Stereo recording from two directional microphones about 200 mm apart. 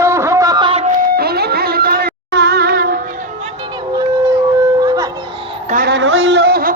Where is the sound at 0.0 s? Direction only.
15° right (ahead or behind).